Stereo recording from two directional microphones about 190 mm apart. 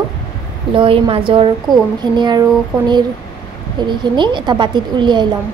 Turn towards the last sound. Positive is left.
turn(degrees=-25)  # may be behind; listen again after turning